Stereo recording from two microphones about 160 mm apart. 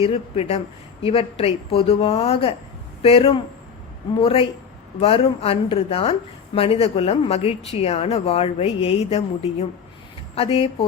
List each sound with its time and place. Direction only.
0.0 s a woman's voice: 40° left (ahead or behind)